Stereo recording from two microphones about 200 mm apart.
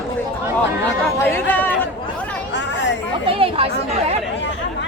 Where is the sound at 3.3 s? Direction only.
25° right (ahead or behind).